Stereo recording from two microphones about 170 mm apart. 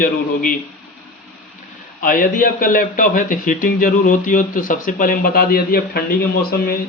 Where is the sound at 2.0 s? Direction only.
55° left (ahead or behind).